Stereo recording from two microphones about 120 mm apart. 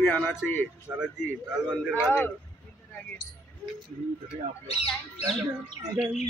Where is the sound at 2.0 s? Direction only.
15° left (ahead or behind).